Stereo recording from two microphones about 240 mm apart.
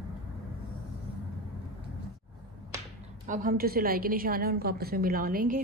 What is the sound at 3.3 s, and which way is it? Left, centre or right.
A woman's voice, right.